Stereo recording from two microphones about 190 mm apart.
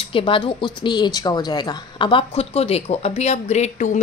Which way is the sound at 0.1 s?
30° left (ahead or behind).